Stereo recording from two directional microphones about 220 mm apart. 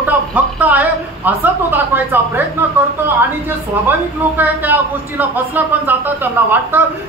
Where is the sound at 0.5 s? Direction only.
5° right (ahead or behind).